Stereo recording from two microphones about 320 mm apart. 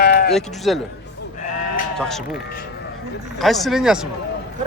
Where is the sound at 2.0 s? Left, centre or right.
Centre.